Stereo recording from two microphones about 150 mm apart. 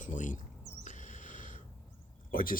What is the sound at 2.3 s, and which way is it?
Speech, 70° left (ahead or behind).